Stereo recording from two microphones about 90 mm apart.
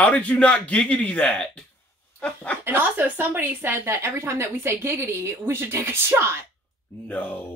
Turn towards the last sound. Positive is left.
turn(degrees=20)  # may be behind; listen again after turning